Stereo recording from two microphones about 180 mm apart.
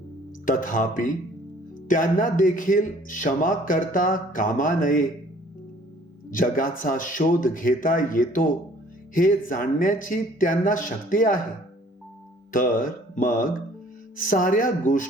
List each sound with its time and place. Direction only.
0.4 s a man's voice: 50° left (ahead or behind)
6.3 s a man's voice: 50° left (ahead or behind)
12.5 s a man's voice: 50° left (ahead or behind)